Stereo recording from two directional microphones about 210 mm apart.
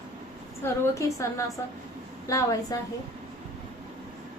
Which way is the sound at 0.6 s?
15° left (ahead or behind).